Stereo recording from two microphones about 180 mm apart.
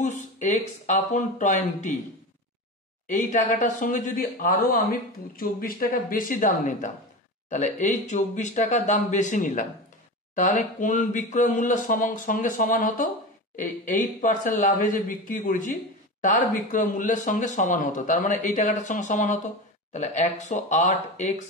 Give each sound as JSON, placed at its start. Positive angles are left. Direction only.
{"t": 0.0, "sound": "speech", "side_deg": 45}
{"t": 3.1, "sound": "speech", "side_deg": 45}